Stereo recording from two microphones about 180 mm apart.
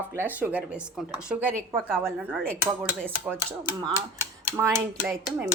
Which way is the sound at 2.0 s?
10° right (ahead or behind).